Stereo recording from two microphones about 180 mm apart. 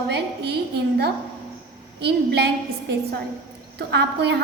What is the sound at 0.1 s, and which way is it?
A woman's voice, 65° right (ahead or behind).